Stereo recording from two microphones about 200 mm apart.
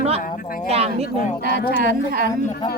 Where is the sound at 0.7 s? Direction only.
30° right (ahead or behind).